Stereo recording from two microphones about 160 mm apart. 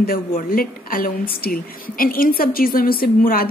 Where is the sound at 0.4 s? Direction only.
60° left (ahead or behind).